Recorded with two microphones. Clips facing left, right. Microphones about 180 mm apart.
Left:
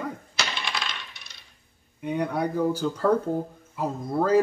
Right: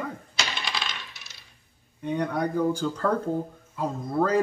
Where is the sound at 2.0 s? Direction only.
10° left (ahead or behind).